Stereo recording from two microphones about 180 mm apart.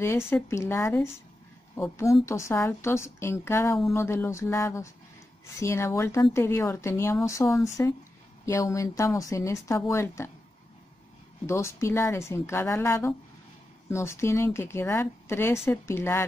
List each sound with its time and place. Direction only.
0.3 s speech: 15° left (ahead or behind)
11.4 s speech: 15° left (ahead or behind)